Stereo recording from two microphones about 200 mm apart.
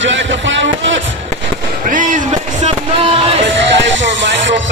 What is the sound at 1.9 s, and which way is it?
Music, 40° right (ahead or behind).